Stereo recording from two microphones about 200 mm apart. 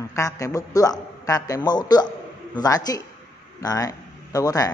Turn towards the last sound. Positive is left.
turn(degrees=15)  # may be behind; listen again after turning